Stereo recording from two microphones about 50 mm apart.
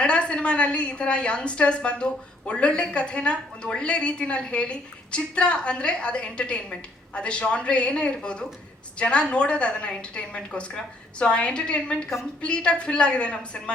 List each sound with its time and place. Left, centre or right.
0.0 s a woman's voice: left